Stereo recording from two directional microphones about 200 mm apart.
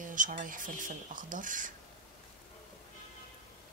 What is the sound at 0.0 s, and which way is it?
Speech, 40° right (ahead or behind).